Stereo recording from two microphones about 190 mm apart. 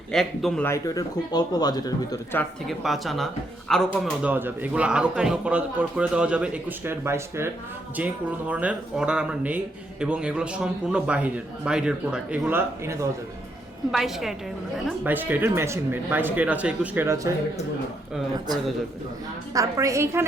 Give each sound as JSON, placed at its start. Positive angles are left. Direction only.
{"t": 0.1, "sound": "a man's voice", "side_deg": 0}
{"t": 0.7, "sound": "speech", "side_deg": 15}
{"t": 2.4, "sound": "a man's voice", "side_deg": 0}
{"t": 13.9, "sound": "a man's voice", "side_deg": 0}
{"t": 19.5, "sound": "a man's voice", "side_deg": -15}